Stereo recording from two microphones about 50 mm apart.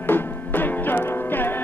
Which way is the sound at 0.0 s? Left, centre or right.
Left.